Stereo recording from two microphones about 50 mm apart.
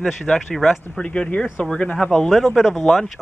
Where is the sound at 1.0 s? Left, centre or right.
Centre.